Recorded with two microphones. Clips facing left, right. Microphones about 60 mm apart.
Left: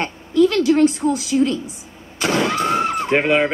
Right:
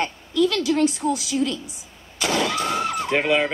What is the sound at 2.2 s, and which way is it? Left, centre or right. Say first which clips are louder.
Vehicle: left 4 dB; left.